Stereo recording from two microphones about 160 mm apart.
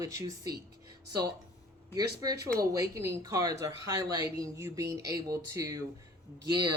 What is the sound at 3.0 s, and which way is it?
Speech, 20° right (ahead or behind).